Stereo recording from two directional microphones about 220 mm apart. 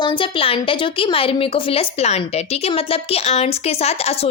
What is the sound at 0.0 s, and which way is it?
A woman's voice, 20° left (ahead or behind).